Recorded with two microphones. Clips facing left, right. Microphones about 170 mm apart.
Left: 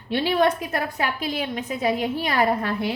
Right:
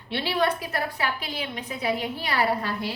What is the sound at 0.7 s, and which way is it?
A woman's voice, 45° left (ahead or behind).